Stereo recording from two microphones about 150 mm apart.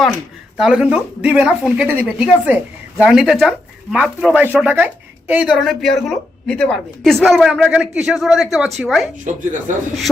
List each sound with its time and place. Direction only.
0.5 s a woman's voice: 5° right (ahead or behind)
9.2 s speech: 60° right (ahead or behind)